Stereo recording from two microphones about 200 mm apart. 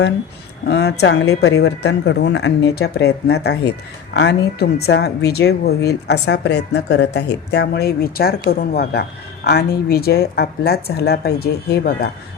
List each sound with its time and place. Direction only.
0.7 s a woman's voice: 55° left (ahead or behind)